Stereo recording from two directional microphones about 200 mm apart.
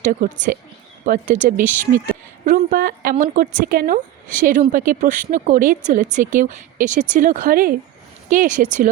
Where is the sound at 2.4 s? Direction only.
45° right (ahead or behind).